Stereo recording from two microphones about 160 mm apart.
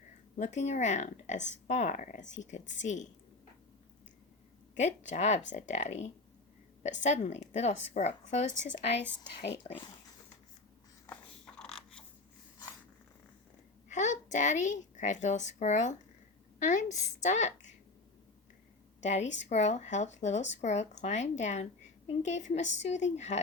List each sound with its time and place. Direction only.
0.3 s speech: 50° left (ahead or behind)
4.7 s speech: 50° left (ahead or behind)
9.4 s speech: 90° left
11.1 s a sound: 5° left (ahead or behind)
13.8 s a woman's voice: 50° left (ahead or behind)
18.9 s speech: 45° left (ahead or behind)